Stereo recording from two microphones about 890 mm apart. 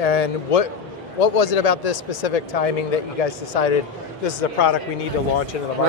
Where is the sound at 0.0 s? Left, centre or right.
Left.